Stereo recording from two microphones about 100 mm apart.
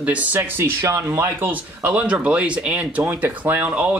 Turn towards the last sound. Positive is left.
turn(degrees=-15)  # may be behind; listen again after turning